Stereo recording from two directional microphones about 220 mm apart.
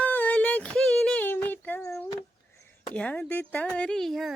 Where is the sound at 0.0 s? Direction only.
10° left (ahead or behind).